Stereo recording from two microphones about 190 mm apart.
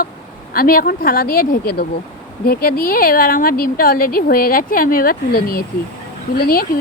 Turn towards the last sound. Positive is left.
turn(degrees=50)  # may be behind; listen again after turning